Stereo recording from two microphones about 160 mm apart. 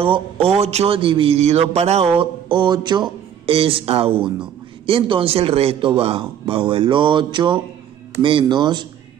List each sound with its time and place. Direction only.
0.0 s speech: 35° right (ahead or behind)
2.1 s speech: 30° right (ahead or behind)